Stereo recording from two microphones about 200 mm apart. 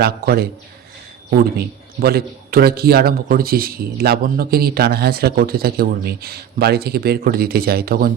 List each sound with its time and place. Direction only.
0.0 s a man's voice: 50° right (ahead or behind)
1.5 s a man's voice: 50° right (ahead or behind)